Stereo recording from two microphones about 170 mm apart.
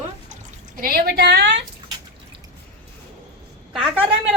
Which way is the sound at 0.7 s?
60° right (ahead or behind).